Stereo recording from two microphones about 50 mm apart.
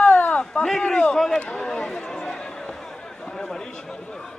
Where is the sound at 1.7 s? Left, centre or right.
Centre.